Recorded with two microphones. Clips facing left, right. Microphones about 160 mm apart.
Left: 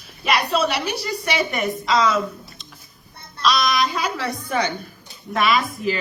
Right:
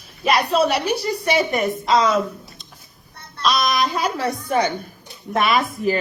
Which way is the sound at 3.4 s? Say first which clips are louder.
Even; 50° right (ahead or behind).